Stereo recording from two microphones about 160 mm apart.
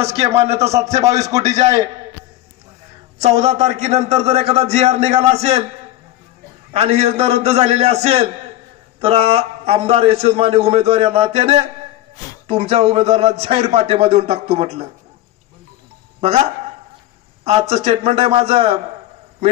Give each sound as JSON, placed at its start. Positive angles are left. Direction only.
{"t": 0.0, "sound": "a man's voice", "side_deg": -40}
{"t": 3.2, "sound": "a man's voice", "side_deg": -40}
{"t": 6.7, "sound": "a man's voice", "side_deg": -40}
{"t": 16.2, "sound": "speech", "side_deg": -40}
{"t": 17.5, "sound": "a man's voice", "side_deg": -40}